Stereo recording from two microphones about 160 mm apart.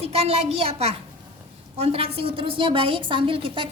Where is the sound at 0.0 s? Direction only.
40° right (ahead or behind).